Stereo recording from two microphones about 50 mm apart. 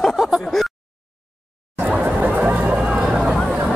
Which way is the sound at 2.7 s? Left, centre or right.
Centre.